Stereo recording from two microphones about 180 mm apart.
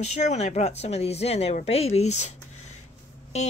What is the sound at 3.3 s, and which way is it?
Speech, 40° left (ahead or behind).